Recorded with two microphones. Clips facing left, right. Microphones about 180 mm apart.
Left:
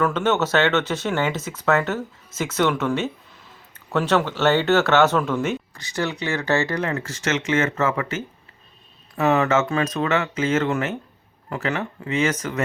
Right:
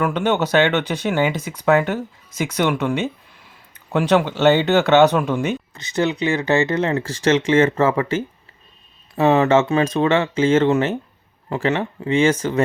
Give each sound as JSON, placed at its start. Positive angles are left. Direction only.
{"t": 0.0, "sound": "speech", "side_deg": -15}